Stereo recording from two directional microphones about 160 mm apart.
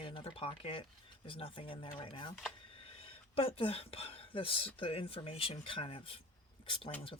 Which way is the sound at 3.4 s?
35° left (ahead or behind).